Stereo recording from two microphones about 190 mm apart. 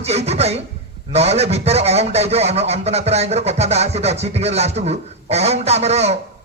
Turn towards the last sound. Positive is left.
turn(degrees=-35)  # may be behind; listen again after turning